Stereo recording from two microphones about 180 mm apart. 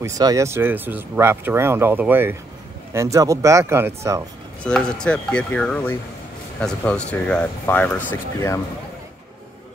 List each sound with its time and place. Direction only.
0.0 s speech: 20° right (ahead or behind)
4.6 s speech: 5° left (ahead or behind)